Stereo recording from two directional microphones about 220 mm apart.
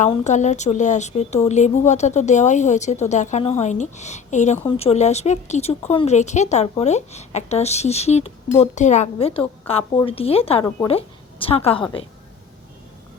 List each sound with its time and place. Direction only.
0.0 s a woman's voice: 35° left (ahead or behind)